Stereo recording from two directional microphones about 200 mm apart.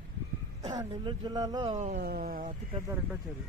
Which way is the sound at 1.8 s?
45° right (ahead or behind).